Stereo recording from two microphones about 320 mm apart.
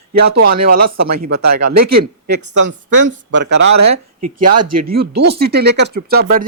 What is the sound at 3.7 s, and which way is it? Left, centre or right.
Speech, right.